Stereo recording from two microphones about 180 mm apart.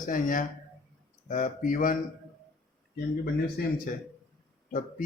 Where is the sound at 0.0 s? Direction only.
50° left (ahead or behind).